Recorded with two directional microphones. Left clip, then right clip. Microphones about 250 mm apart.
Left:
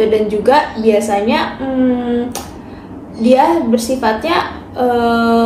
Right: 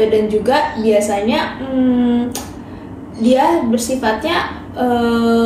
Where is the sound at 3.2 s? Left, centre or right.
Left.